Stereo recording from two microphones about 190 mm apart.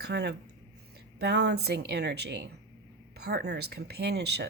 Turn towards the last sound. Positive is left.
turn(degrees=-60)  # may be behind; listen again after turning